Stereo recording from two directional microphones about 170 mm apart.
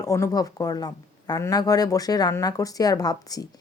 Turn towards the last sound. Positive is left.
turn(degrees=20)  # may be behind; listen again after turning